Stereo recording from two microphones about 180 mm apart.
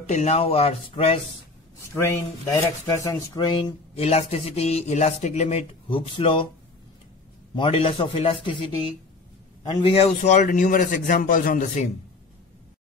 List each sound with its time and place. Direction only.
0.1 s speech: 35° left (ahead or behind)
2.0 s speech: 15° left (ahead or behind)
7.5 s a man's voice: 30° left (ahead or behind)